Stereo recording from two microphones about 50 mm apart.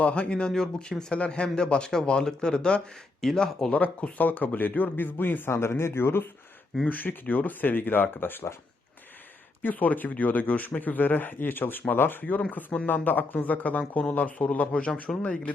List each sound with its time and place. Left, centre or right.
0.0 s speech: left
3.7 s speech: left
5.5 s speech: left
6.8 s speech: left
9.6 s speech: left
12.2 s speech: left